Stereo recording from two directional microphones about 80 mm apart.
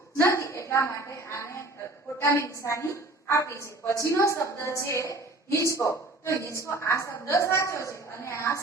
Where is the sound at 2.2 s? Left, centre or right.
Left.